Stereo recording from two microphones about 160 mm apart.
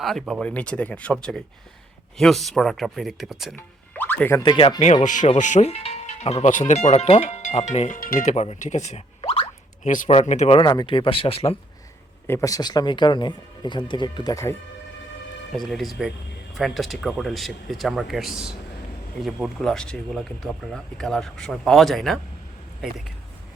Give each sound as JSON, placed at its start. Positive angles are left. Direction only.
{"t": 0.0, "sound": "speech", "side_deg": 0}
{"t": 3.5, "sound": "music", "side_deg": 10}
{"t": 4.4, "sound": "speech", "side_deg": 30}
{"t": 9.9, "sound": "speech", "side_deg": 55}
{"t": 10.6, "sound": "speech", "side_deg": 30}
{"t": 12.3, "sound": "speech", "side_deg": 20}
{"t": 15.5, "sound": "speech", "side_deg": 0}